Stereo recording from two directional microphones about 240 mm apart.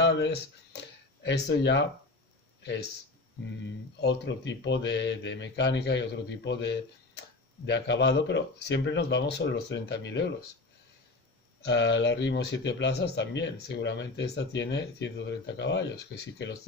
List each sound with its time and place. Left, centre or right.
0.0 s speech: left
4.0 s a man's voice: left
11.6 s a man's voice: left